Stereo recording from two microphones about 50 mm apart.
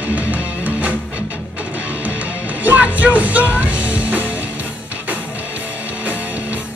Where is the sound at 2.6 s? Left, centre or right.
Right.